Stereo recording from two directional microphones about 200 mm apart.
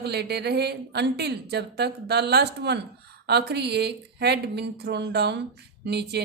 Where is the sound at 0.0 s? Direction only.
55° right (ahead or behind).